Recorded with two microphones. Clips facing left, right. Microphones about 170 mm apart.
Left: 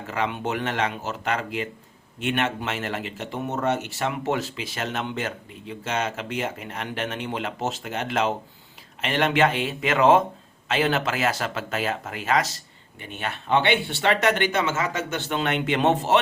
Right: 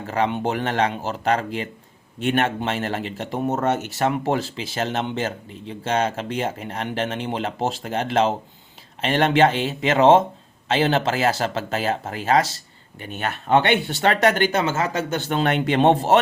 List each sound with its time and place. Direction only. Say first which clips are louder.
0.1 s speech: right 4 dB; 35° right (ahead or behind)
13.0 s speech: right 4 dB; 45° right (ahead or behind)